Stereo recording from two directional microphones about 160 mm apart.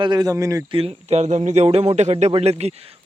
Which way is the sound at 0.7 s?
35° right (ahead or behind).